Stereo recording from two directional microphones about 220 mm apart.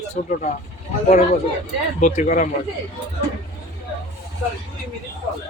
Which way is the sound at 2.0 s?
35° left (ahead or behind).